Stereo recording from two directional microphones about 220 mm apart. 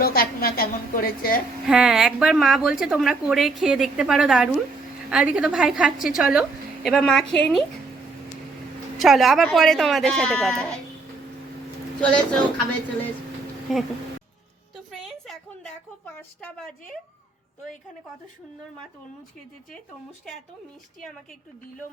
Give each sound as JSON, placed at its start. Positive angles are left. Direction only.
{"t": 0.0, "sound": "a woman's voice", "side_deg": 45}
{"t": 1.6, "sound": "a woman's voice", "side_deg": -5}
{"t": 9.0, "sound": "a woman's voice", "side_deg": 0}
{"t": 11.9, "sound": "a woman's voice", "side_deg": 5}
{"t": 13.7, "sound": "a woman's voice", "side_deg": 0}
{"t": 14.8, "sound": "a sound", "side_deg": 0}